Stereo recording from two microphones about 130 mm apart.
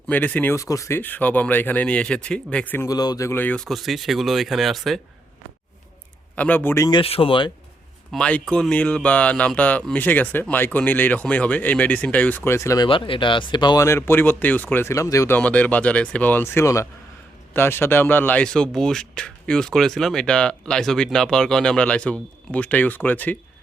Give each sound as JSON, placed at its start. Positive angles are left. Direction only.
{"t": 0.1, "sound": "speech", "side_deg": 10}
{"t": 0.5, "sound": "speech", "side_deg": 25}
{"t": 2.8, "sound": "speech", "side_deg": 30}
{"t": 6.3, "sound": "speech", "side_deg": 10}
{"t": 7.0, "sound": "speech", "side_deg": 45}
{"t": 8.1, "sound": "speech", "side_deg": 10}
{"t": 12.5, "sound": "speech", "side_deg": 20}
{"t": 12.9, "sound": "speech", "side_deg": 40}
{"t": 13.8, "sound": "speech", "side_deg": 20}
{"t": 15.4, "sound": "speech", "side_deg": 10}